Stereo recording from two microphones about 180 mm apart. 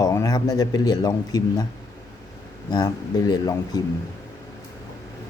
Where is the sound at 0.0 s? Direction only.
20° left (ahead or behind).